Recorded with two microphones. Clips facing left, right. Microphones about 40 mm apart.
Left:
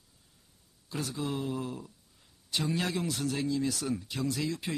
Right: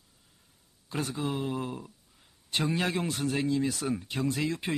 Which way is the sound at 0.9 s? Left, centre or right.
Right.